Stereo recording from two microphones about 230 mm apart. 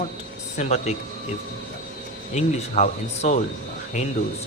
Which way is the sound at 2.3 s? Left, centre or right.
Left.